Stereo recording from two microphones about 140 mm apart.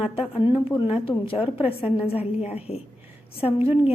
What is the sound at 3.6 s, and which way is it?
Speech, 15° right (ahead or behind).